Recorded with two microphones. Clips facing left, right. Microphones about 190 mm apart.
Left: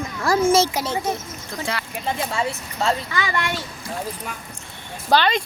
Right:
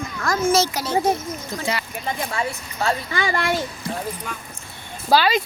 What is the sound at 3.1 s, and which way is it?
Speech, 35° right (ahead or behind).